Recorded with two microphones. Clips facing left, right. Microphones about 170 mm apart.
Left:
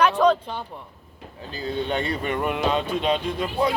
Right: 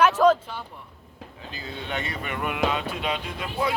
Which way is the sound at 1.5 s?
35° left (ahead or behind).